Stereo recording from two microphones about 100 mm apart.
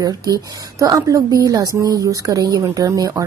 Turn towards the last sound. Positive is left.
turn(degrees=-35)  # may be behind; listen again after turning